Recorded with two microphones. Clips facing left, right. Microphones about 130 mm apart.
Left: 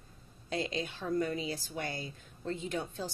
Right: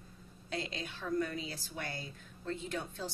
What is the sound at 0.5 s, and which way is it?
A woman's voice, 20° left (ahead or behind).